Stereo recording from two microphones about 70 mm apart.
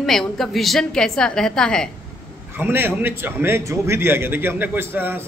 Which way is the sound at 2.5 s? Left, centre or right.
Right.